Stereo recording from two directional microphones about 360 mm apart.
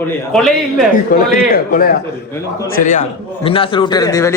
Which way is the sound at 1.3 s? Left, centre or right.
Left.